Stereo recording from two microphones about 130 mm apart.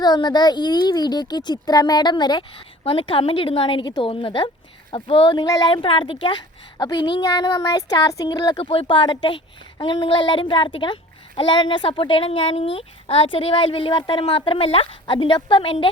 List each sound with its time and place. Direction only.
0.0 s speech: 30° left (ahead or behind)
2.8 s a woman's voice: 45° left (ahead or behind)